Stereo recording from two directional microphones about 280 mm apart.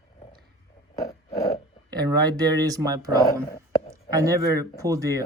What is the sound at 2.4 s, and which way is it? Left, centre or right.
Speech, centre.